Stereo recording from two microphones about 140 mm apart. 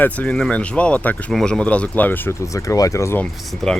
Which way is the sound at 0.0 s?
10° left (ahead or behind).